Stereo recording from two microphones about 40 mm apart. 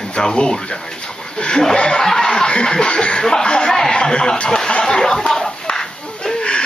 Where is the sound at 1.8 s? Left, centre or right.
Left.